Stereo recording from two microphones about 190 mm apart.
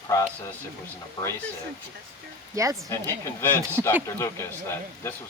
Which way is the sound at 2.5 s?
15° right (ahead or behind).